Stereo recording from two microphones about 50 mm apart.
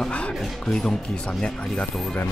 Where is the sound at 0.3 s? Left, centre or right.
Centre.